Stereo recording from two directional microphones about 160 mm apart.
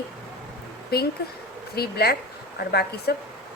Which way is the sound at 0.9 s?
75° left (ahead or behind).